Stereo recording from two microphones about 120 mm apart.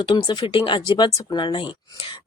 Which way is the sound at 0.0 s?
40° left (ahead or behind).